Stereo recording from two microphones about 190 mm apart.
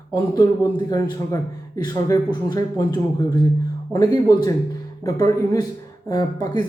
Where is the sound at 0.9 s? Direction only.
20° left (ahead or behind).